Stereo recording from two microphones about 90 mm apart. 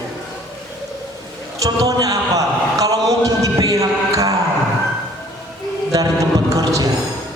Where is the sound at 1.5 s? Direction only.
40° right (ahead or behind).